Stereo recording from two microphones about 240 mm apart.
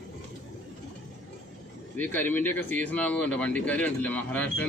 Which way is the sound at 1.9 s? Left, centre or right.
Centre.